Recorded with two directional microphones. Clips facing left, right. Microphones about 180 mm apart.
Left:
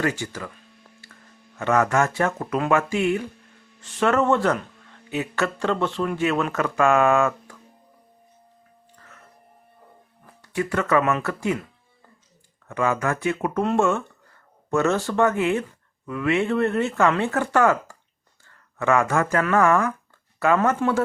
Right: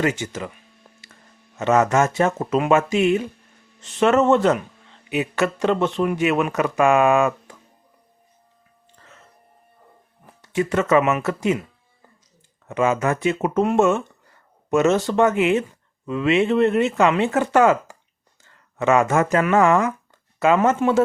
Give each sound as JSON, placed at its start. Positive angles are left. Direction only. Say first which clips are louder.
{"t": 0.0, "sound": "speech", "louder": "right 3 dB", "side_deg": -20}
{"t": 1.5, "sound": "speech", "louder": "right 3 dB", "side_deg": -20}
{"t": 10.4, "sound": "speech", "louder": "right 4 dB", "side_deg": -20}
{"t": 12.6, "sound": "speech", "louder": "right 3 dB", "side_deg": -20}